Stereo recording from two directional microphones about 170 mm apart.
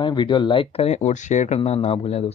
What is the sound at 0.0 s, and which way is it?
Speech, 30° left (ahead or behind).